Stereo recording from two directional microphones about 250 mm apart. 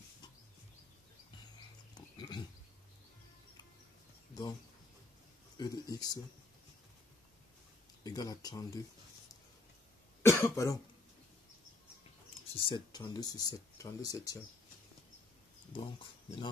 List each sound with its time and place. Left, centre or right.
2.0 s pig: centre
5.6 s speech: centre
8.0 s speech: centre
10.2 s cough: centre
12.5 s speech: centre
15.7 s speech: centre